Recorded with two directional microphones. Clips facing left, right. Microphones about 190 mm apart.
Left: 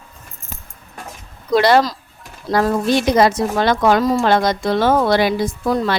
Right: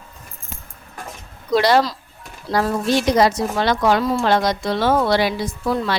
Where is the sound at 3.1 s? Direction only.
55° left (ahead or behind).